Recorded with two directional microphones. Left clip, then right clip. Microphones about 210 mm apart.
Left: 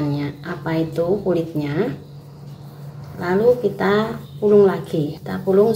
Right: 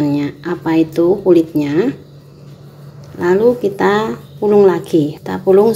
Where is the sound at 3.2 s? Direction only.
35° right (ahead or behind).